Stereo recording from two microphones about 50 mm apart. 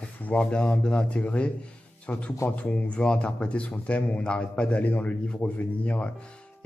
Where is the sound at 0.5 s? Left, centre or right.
Centre.